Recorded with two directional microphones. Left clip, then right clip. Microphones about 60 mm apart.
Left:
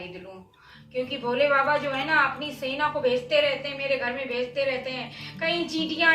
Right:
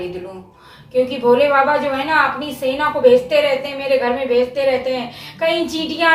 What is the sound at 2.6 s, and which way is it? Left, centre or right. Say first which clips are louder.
A woman's voice: right 11 dB; centre.